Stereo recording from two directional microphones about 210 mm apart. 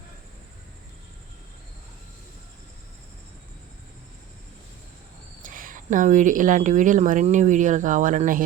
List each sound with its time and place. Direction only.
5.4 s speech: 40° right (ahead or behind)